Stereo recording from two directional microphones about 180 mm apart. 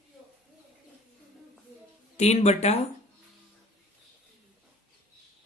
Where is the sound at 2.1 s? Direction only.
40° left (ahead or behind).